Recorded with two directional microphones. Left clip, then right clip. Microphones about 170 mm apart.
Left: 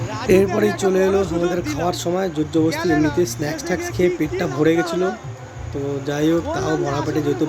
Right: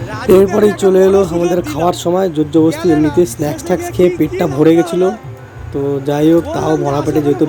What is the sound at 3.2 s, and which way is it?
Speech, 30° right (ahead or behind).